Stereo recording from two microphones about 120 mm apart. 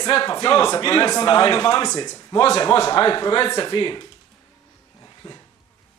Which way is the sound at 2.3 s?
55° left (ahead or behind).